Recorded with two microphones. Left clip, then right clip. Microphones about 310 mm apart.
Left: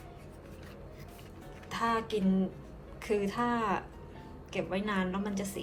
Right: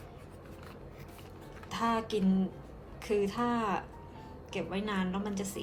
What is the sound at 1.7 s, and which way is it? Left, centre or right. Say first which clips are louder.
A woman's voice: left 1 dB; centre.